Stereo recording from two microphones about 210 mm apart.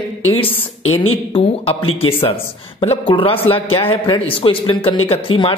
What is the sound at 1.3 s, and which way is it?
Speech, 25° left (ahead or behind).